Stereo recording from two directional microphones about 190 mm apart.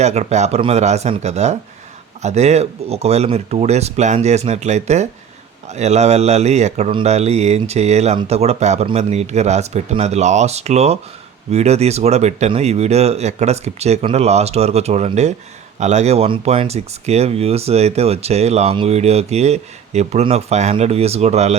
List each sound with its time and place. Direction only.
0.0 s speech: 35° right (ahead or behind)